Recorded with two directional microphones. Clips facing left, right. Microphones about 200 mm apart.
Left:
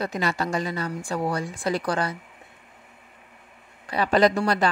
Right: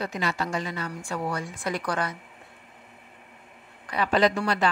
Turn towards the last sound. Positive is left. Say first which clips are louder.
# left 3 dB
turn(degrees=40)  # may be behind; listen again after turning